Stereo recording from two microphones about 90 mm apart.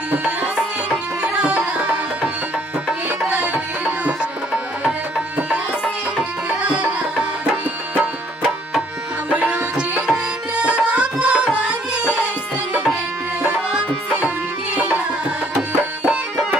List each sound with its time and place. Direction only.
0.8 s music: 10° right (ahead or behind)
6.6 s music: 10° right (ahead or behind)
7.9 s music: 15° right (ahead or behind)
9.3 s tabla: 15° right (ahead or behind)
13.4 s tabla: 15° right (ahead or behind)
16.1 s music: 10° right (ahead or behind)